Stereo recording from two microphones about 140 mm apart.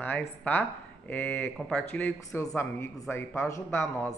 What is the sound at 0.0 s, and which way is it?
Speech, 15° left (ahead or behind).